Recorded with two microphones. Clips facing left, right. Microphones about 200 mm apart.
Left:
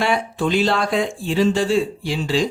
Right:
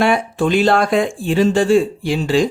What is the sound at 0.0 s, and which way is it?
Speech, 50° right (ahead or behind).